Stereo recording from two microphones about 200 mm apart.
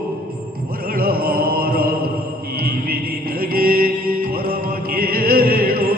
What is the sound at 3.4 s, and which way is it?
Music, 45° right (ahead or behind).